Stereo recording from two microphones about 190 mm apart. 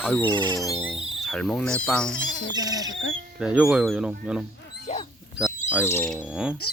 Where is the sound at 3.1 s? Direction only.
Centre (ahead or behind).